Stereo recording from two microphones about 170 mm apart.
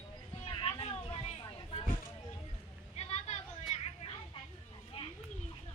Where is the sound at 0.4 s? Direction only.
30° left (ahead or behind).